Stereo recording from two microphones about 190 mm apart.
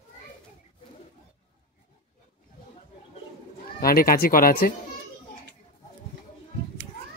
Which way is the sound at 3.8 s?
50° left (ahead or behind).